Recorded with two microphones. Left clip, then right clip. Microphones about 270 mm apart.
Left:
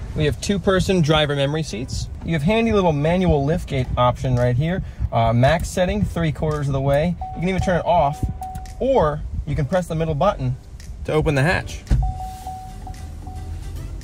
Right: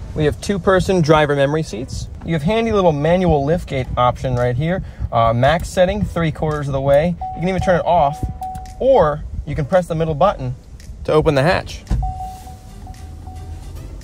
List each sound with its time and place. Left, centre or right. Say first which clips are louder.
0.2 s speech: right 3 dB; right
2.5 s speech: right 3 dB; right